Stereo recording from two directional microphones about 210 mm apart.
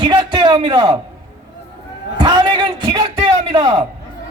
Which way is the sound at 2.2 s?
20° right (ahead or behind).